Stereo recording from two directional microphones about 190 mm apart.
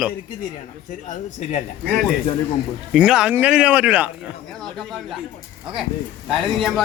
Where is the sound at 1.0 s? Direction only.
40° left (ahead or behind).